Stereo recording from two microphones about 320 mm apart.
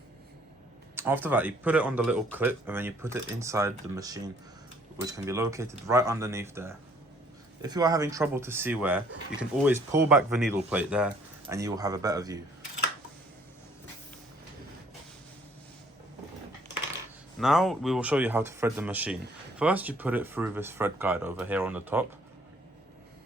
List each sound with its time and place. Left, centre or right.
0.9 s speech: centre
17.4 s speech: centre